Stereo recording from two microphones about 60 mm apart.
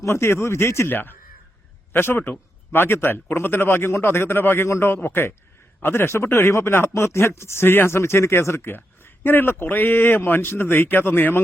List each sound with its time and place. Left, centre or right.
0.0 s speech: left
0.9 s a man's voice: left
8.7 s a man's voice: left